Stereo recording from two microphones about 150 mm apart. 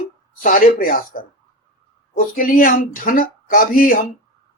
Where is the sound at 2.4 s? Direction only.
70° left (ahead or behind).